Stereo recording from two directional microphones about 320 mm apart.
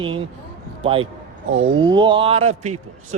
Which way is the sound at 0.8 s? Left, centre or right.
Centre.